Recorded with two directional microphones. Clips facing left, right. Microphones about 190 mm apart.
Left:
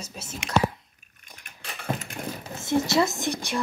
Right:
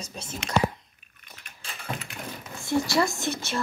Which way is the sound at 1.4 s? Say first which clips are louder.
Left 3 dB; 50° left (ahead or behind).